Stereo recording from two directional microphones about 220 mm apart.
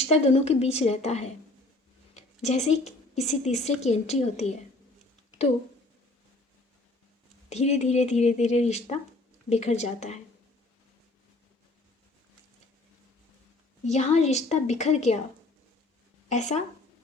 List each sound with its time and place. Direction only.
0.1 s a woman's voice: 30° left (ahead or behind)
7.5 s speech: 30° left (ahead or behind)
13.8 s speech: 30° left (ahead or behind)
16.3 s speech: 30° left (ahead or behind)